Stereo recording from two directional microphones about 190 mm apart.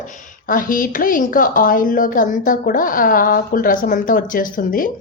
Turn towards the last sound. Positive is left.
turn(degrees=45)  # may be behind; listen again after turning